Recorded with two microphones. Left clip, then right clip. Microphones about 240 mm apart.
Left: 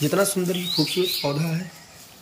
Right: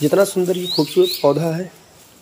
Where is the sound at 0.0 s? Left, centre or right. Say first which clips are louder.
Right 7 dB; centre.